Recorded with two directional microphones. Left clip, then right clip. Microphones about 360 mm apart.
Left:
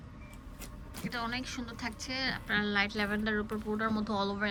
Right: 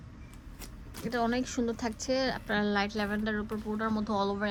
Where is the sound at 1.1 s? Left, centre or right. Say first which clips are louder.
Right 6 dB; centre.